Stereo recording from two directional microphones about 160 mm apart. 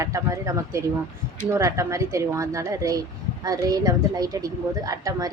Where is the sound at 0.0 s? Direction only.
20° right (ahead or behind).